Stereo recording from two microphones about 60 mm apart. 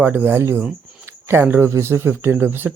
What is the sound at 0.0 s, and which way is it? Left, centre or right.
Speech, right.